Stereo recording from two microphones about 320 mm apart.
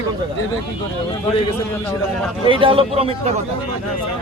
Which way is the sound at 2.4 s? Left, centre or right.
Centre.